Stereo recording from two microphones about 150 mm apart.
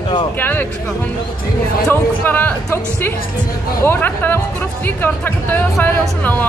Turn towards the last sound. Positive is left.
turn(degrees=15)  # may be behind; listen again after turning